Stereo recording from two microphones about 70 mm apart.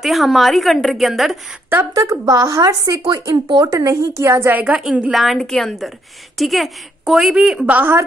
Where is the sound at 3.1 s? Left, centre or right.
Right.